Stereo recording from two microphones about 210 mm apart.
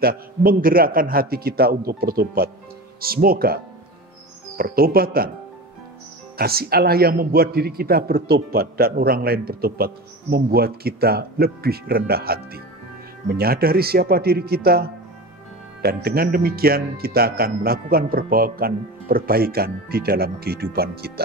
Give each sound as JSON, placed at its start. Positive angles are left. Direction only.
{"t": 0.0, "sound": "a man's voice", "side_deg": -45}
{"t": 6.3, "sound": "a man's voice", "side_deg": -45}